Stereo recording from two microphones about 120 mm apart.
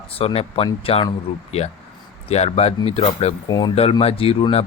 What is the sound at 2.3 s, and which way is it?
Speech, 60° left (ahead or behind).